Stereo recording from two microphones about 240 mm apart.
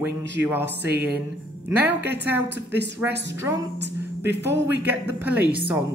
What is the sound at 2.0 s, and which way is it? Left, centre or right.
Speech, right.